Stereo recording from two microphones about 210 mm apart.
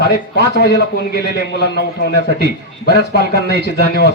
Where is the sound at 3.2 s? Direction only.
50° right (ahead or behind).